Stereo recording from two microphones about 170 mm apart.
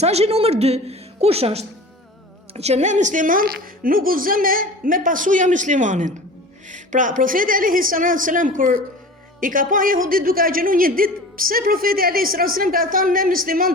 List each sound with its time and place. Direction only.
0.0 s a woman's voice: 40° right (ahead or behind); by 13.7 s 60° right (ahead or behind)